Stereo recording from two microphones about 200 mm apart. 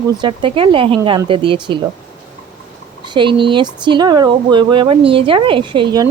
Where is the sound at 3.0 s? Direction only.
25° right (ahead or behind).